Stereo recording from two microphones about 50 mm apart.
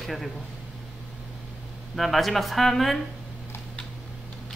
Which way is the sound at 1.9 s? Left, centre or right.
Centre.